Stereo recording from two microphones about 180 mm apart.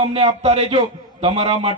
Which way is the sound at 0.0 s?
35° right (ahead or behind).